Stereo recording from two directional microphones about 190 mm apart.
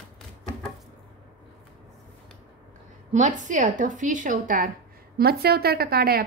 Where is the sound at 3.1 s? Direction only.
40° right (ahead or behind).